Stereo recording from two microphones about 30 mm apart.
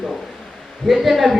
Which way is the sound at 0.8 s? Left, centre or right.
Centre.